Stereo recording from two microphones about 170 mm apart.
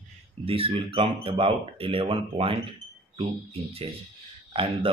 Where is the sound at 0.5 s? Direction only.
35° right (ahead or behind).